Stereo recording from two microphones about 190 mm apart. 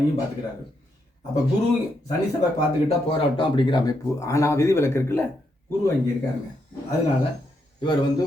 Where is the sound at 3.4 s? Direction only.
25° left (ahead or behind).